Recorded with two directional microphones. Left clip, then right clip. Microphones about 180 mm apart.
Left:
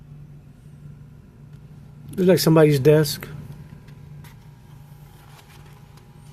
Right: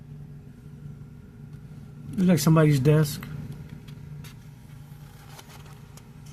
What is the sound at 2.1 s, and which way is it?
Speech, 60° left (ahead or behind).